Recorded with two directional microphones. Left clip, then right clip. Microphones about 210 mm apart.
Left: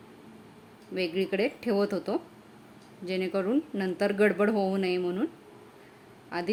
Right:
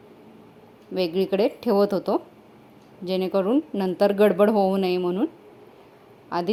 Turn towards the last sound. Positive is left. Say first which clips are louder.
# right 7 dB
turn(degrees=-20)  # may be behind; listen again after turning